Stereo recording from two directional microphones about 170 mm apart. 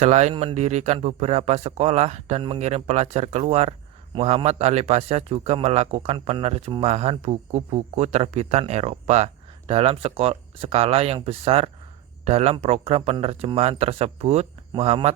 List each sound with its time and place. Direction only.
0.0 s speech: 40° right (ahead or behind)